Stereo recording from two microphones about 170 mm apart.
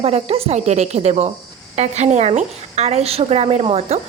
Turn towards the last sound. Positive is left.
turn(degrees=-40)  # may be behind; listen again after turning